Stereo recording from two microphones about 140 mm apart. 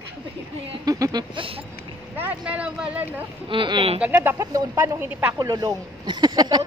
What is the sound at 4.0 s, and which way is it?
Speech, 15° right (ahead or behind).